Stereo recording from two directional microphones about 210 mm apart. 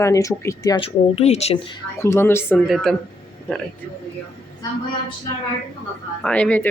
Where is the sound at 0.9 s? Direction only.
30° left (ahead or behind).